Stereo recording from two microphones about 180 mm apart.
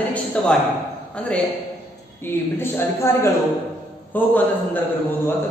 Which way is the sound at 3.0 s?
15° left (ahead or behind).